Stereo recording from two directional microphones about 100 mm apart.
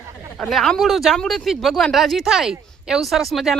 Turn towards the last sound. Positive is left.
turn(degrees=0)  # may be behind; listen again after turning